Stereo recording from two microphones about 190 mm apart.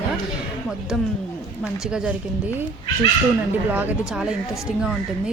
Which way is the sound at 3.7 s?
10° right (ahead or behind).